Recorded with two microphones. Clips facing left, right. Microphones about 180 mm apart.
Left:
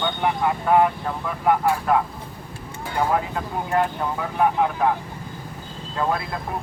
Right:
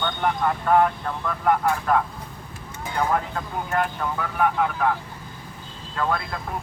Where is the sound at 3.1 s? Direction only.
15° left (ahead or behind).